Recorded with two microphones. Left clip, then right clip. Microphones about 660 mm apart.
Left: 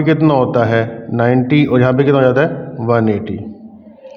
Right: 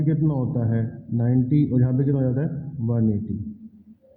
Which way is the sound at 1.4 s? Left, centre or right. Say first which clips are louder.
Left 12 dB; left.